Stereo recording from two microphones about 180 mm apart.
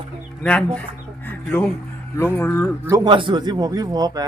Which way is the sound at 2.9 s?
25° right (ahead or behind).